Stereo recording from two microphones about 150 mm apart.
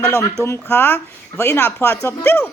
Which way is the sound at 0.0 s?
15° left (ahead or behind).